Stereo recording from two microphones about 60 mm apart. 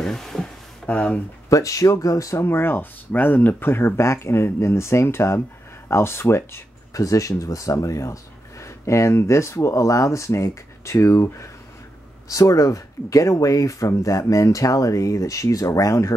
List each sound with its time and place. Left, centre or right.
0.0 s a sound: centre
0.8 s speech: left
1.5 s speech: left
2.4 s speech: left
6.9 s speech: left
9.7 s speech: left
12.3 s speech: left